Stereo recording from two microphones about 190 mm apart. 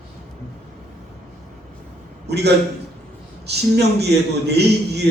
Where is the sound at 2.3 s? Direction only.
60° right (ahead or behind).